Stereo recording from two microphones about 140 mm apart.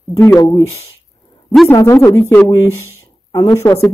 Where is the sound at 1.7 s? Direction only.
20° left (ahead or behind).